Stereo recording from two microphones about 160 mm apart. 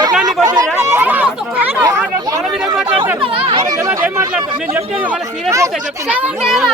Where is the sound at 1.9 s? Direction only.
20° right (ahead or behind).